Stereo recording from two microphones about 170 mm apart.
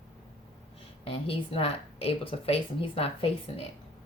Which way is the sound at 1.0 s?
35° left (ahead or behind).